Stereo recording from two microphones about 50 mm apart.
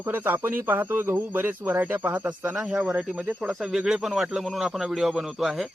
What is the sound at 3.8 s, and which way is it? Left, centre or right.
A man's voice, centre.